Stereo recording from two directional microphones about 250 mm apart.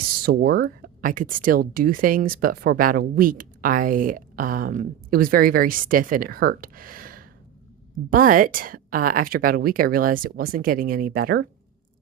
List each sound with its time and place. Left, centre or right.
0.0 s speech: right